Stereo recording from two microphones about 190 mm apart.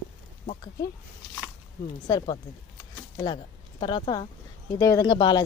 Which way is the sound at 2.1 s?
20° left (ahead or behind).